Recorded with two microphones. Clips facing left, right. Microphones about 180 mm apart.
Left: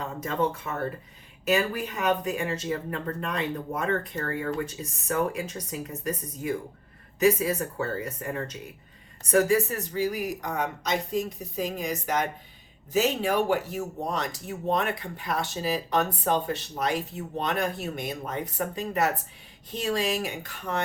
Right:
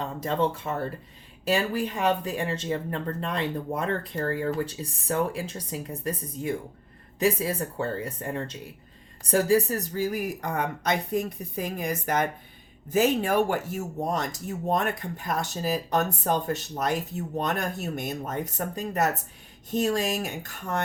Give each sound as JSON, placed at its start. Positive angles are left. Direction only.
{"t": 0.0, "sound": "speech", "side_deg": -30}